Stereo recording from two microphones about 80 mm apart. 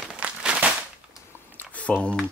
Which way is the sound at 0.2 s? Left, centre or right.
Centre.